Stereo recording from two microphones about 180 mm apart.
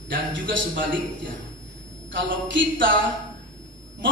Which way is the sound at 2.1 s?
90° right.